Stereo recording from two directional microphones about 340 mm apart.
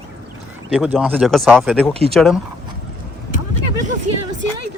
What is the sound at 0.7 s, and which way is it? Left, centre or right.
Speech, centre.